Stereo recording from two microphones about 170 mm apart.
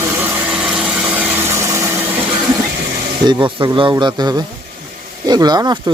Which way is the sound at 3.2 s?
25° right (ahead or behind).